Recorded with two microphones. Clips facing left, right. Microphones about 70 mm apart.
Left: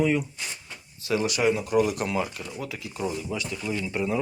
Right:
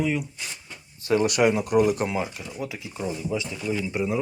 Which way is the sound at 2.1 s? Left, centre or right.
Centre.